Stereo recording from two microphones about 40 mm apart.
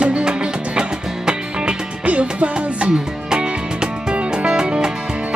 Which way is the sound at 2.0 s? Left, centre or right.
Right.